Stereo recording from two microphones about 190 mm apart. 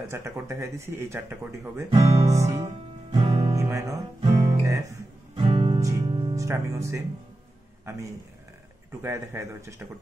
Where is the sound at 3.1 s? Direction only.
30° right (ahead or behind).